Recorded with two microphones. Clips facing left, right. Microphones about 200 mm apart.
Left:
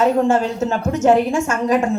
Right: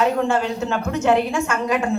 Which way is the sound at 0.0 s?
45° left (ahead or behind).